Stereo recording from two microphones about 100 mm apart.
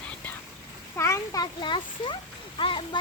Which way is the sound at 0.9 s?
25° left (ahead or behind).